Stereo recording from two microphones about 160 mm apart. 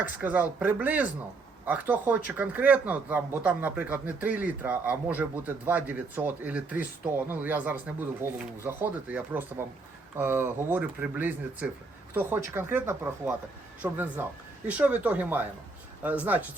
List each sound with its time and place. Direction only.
0.0 s a man's voice: 10° right (ahead or behind)